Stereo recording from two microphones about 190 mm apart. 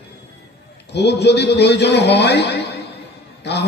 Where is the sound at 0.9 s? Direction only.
60° left (ahead or behind).